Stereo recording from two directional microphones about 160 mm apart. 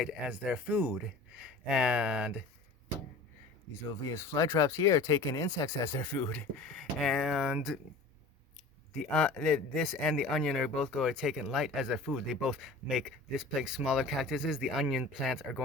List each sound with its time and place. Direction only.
0.0 s speech: 5° right (ahead or behind)
4.1 s speech: 15° left (ahead or behind); by 7.8 s centre (ahead or behind)
9.1 s speech: 5° left (ahead or behind)